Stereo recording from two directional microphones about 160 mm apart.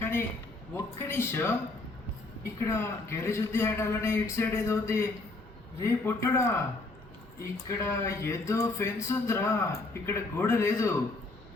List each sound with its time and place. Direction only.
0.0 s a sound: 15° left (ahead or behind)
0.7 s a man's voice: 15° left (ahead or behind)
2.6 s a man's voice: 15° left (ahead or behind)
7.7 s a man's voice: 20° left (ahead or behind)